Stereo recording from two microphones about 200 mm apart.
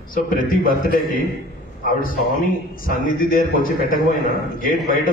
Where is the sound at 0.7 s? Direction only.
45° left (ahead or behind).